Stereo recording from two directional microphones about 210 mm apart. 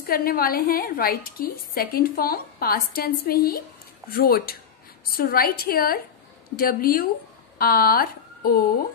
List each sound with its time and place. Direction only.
0.0 s a woman's voice: 45° left (ahead or behind)